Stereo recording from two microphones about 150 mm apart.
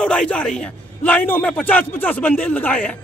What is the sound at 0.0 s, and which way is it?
A man's voice, 5° left (ahead or behind).